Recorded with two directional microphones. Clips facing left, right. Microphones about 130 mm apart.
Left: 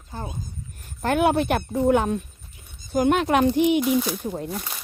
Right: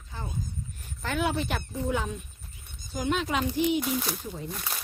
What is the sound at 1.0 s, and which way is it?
Speech, 55° left (ahead or behind).